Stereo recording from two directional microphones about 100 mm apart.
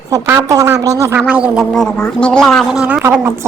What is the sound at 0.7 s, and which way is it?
Speech, 10° right (ahead or behind).